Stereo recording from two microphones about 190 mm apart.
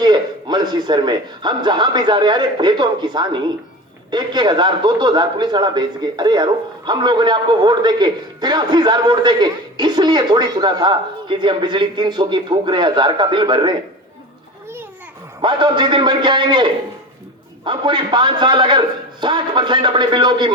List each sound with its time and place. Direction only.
0.0 s a man's voice: 25° right (ahead or behind)
15.4 s a man's voice: 25° right (ahead or behind)